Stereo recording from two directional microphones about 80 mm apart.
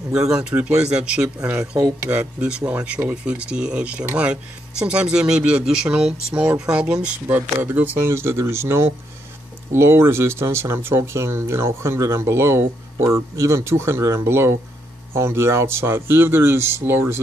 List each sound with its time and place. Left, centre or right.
0.3 s speech: centre; by 17.2 s right